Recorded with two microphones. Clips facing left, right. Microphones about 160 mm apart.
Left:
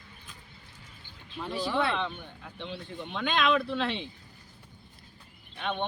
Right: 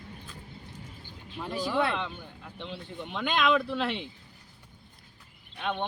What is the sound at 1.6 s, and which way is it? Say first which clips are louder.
Speech: even; 15° right (ahead or behind).